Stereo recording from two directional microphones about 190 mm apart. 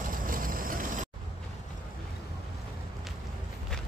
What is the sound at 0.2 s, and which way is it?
Vehicle, 45° right (ahead or behind).